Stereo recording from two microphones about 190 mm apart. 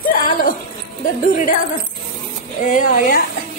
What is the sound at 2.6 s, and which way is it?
Speech, 45° left (ahead or behind).